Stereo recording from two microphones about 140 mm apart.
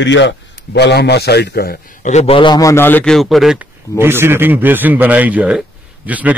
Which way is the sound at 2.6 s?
20° left (ahead or behind).